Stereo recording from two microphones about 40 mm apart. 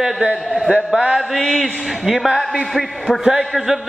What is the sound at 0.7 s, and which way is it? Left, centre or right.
Speech, right.